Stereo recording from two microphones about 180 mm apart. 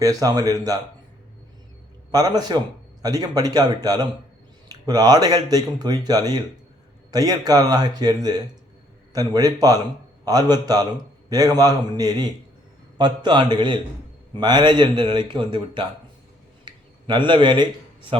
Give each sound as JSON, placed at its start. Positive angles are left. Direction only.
{"t": 0.0, "sound": "speech", "side_deg": -20}
{"t": 2.1, "sound": "speech", "side_deg": -20}
{"t": 16.6, "sound": "a sound", "side_deg": -25}
{"t": 18.1, "sound": "a man's voice", "side_deg": -30}